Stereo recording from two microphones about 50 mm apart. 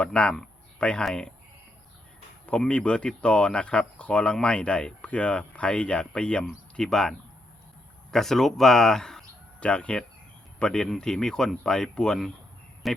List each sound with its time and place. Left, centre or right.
0.0 s speech: left
2.6 s speech: left
9.6 s speech: left
12.8 s speech: centre